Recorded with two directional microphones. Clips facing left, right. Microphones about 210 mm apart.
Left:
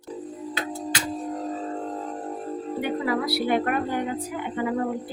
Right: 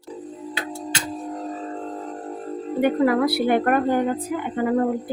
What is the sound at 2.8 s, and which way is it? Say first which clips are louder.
A woman's voice: right 8 dB; 50° right (ahead or behind).